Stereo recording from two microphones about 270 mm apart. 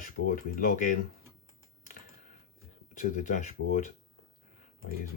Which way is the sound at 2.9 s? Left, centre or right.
Left.